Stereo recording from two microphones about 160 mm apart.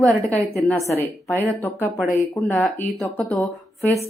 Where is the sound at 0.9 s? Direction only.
15° left (ahead or behind).